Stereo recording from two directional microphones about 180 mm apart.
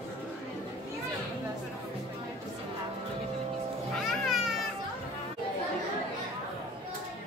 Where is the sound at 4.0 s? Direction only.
Centre (ahead or behind).